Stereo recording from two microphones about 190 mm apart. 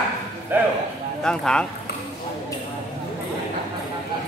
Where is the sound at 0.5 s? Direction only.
10° right (ahead or behind).